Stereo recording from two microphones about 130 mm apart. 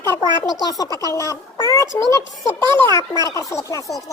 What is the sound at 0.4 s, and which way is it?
A woman's voice, 30° left (ahead or behind).